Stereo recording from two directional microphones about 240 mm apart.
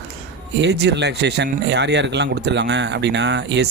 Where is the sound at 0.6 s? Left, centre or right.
Right.